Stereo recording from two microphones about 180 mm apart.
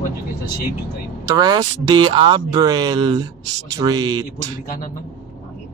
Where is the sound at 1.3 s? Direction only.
20° right (ahead or behind).